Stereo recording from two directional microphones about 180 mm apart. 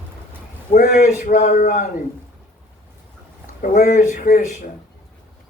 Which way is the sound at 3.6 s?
45° left (ahead or behind).